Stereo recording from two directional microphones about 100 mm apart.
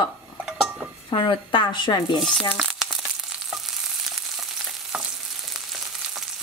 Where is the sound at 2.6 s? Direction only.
5° right (ahead or behind).